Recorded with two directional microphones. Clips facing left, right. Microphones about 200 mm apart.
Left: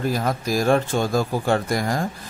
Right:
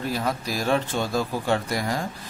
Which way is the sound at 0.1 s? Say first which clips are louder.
Left 4 dB; 45° left (ahead or behind).